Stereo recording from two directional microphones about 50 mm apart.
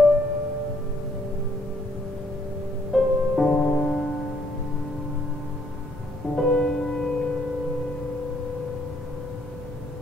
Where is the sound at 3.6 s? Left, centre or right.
Left.